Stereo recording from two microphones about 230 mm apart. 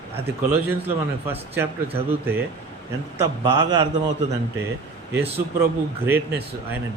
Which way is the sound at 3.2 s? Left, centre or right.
Centre.